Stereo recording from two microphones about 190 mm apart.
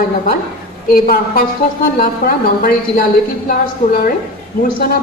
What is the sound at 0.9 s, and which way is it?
A woman's voice, 50° left (ahead or behind).